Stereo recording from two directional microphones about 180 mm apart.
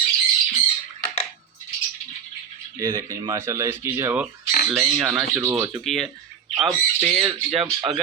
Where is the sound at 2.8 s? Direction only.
15° right (ahead or behind).